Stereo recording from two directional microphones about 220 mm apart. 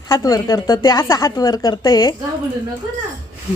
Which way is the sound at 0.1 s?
15° left (ahead or behind).